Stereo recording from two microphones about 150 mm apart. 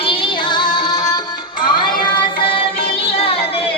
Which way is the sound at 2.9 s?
40° left (ahead or behind).